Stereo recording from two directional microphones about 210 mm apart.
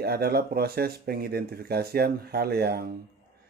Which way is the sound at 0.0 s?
45° right (ahead or behind).